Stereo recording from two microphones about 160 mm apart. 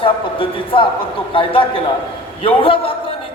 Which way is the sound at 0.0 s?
35° left (ahead or behind).